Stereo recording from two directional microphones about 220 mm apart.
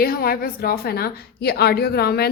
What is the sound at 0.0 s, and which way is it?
A woman's voice, 45° left (ahead or behind).